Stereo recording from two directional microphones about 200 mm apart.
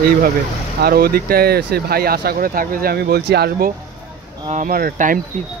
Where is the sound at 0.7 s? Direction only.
50° right (ahead or behind).